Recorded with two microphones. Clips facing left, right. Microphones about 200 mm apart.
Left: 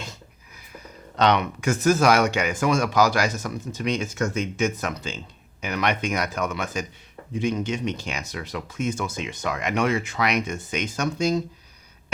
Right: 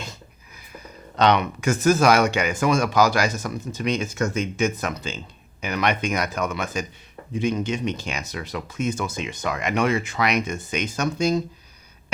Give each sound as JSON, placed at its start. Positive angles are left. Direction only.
{"t": 0.7, "sound": "a sound", "side_deg": -10}
{"t": 1.6, "sound": "speech", "side_deg": -5}
{"t": 3.3, "sound": "speech", "side_deg": -20}
{"t": 3.8, "sound": "speech", "side_deg": -10}